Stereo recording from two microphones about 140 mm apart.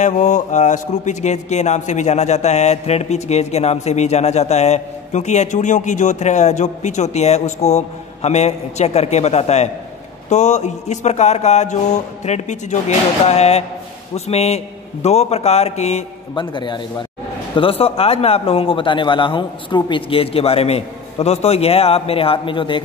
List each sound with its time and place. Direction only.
0.0 s speech: 60° left (ahead or behind)
16.3 s speech: 35° left (ahead or behind)